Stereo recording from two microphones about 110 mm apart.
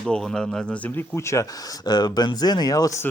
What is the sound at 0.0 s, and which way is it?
Speech, 5° left (ahead or behind).